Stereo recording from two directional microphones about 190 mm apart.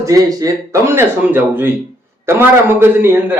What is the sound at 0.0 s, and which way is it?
A man's voice, 20° right (ahead or behind).